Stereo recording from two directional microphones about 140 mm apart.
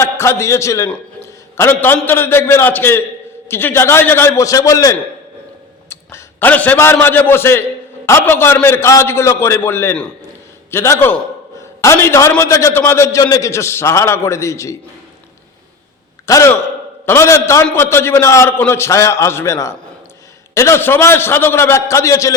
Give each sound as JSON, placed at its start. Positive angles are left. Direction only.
{"t": 0.0, "sound": "a man's voice", "side_deg": 20}
{"t": 16.2, "sound": "a man's voice", "side_deg": 20}